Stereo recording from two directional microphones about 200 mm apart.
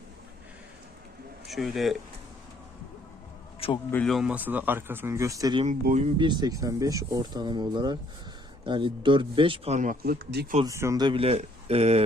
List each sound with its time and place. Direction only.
1.5 s speech: centre (ahead or behind)
3.6 s a sound: 30° left (ahead or behind)
3.9 s speech: centre (ahead or behind); by 5.6 s 20° right (ahead or behind)
5.6 s speech: 40° right (ahead or behind)
6.1 s speech: 20° right (ahead or behind); by 10.4 s 45° right (ahead or behind)
10.7 s speech: 15° right (ahead or behind); by 12.0 s 30° right (ahead or behind)